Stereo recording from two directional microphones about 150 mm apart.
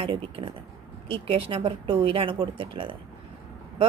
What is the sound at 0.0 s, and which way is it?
A woman's voice, 35° right (ahead or behind).